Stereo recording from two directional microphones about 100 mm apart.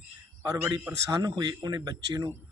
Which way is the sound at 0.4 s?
35° right (ahead or behind).